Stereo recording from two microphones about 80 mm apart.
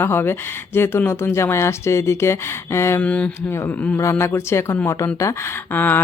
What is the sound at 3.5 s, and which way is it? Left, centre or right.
Speech, left.